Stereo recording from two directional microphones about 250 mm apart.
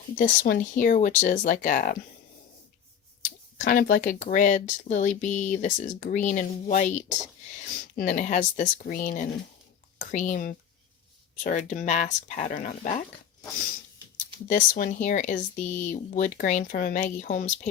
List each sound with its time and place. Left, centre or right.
0.2 s speech: left
3.2 s speech: left
14.4 s speech: left